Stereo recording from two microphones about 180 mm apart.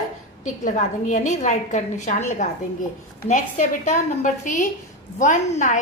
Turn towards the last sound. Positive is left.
turn(degrees=40)  # may be behind; listen again after turning